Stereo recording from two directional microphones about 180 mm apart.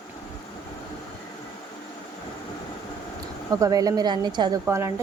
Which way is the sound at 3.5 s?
20° right (ahead or behind).